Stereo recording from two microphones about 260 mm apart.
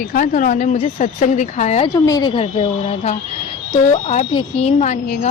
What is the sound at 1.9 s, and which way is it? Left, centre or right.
A woman's voice, centre.